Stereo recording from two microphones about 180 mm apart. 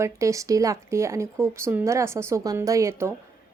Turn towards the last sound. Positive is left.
turn(degrees=-15)  # may be behind; listen again after turning